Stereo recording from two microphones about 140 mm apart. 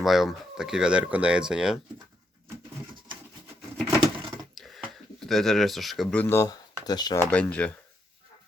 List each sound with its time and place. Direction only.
0.0 s speech: centre (ahead or behind)
4.5 s a sound: centre (ahead or behind)
6.1 s speech: 15° left (ahead or behind)
7.2 s speech: 10° left (ahead or behind)